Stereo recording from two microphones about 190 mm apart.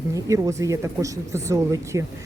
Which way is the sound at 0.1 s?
15° right (ahead or behind).